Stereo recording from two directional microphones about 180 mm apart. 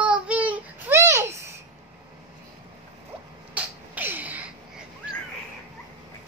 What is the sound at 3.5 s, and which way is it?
Sneeze, 10° right (ahead or behind).